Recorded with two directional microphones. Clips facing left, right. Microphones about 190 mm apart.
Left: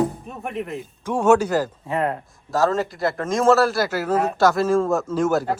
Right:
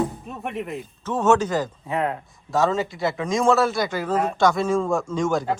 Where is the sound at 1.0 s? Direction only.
10° left (ahead or behind).